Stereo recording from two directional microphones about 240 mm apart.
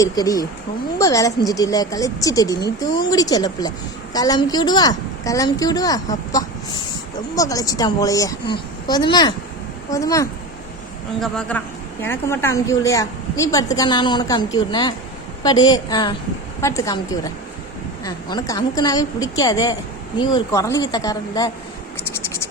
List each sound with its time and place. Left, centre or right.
0.0 s a woman's voice: centre